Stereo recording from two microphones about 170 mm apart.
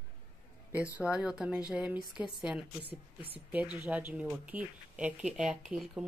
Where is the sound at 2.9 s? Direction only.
35° right (ahead or behind).